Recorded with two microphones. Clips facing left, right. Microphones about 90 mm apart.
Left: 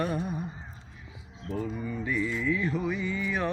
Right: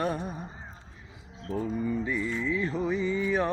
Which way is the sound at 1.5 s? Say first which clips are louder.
Right 3 dB; 30° right (ahead or behind).